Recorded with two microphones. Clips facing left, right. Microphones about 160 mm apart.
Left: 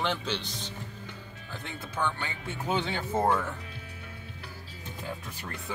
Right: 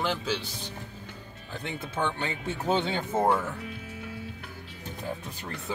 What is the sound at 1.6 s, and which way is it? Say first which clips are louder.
Speech: right 2 dB; 30° right (ahead or behind).